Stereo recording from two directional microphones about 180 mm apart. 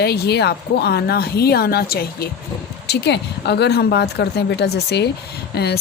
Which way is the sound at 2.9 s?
70° left (ahead or behind).